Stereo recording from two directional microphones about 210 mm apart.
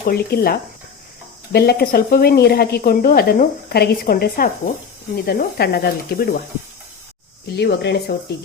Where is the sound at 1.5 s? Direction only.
50° left (ahead or behind).